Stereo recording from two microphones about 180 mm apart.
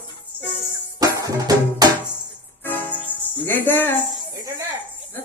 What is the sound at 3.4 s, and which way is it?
Speech, 10° left (ahead or behind).